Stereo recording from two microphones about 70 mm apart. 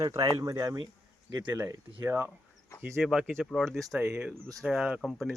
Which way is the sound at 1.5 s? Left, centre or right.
Right.